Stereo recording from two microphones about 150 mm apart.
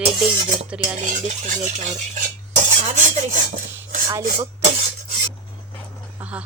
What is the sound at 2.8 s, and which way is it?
Filing, 50° right (ahead or behind).